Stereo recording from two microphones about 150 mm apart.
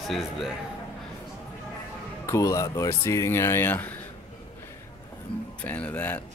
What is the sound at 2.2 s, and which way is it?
Speech, 20° left (ahead or behind).